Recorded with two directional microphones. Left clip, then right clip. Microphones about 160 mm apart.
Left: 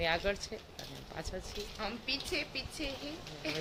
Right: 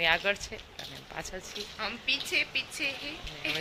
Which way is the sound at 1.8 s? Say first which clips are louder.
Right 7 dB; 10° left (ahead or behind).